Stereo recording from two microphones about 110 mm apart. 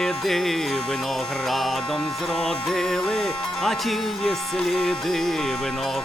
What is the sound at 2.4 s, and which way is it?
Music, 5° left (ahead or behind).